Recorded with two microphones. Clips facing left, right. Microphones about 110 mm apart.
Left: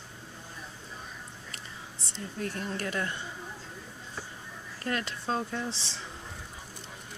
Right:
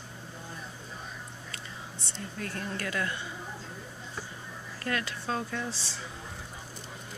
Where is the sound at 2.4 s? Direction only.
20° left (ahead or behind).